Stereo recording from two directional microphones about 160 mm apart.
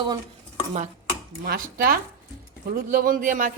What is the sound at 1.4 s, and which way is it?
A woman's voice, 65° right (ahead or behind).